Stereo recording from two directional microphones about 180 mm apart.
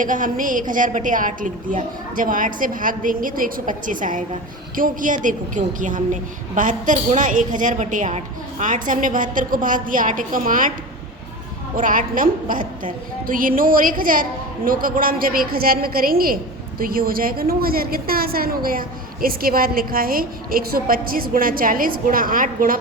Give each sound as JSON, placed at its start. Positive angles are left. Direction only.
{"t": 0.0, "sound": "a woman's voice", "side_deg": -45}
{"t": 11.8, "sound": "a woman's voice", "side_deg": -45}